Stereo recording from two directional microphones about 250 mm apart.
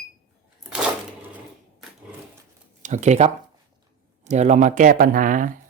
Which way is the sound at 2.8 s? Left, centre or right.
Right.